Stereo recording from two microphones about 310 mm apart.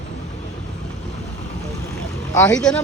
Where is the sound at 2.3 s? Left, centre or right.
Centre.